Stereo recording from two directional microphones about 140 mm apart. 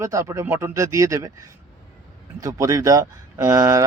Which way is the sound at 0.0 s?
20° right (ahead or behind).